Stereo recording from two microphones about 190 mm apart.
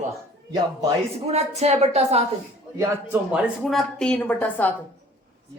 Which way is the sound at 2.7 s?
10° right (ahead or behind).